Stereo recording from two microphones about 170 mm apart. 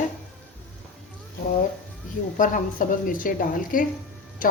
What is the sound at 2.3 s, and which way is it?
A woman's voice, 50° left (ahead or behind).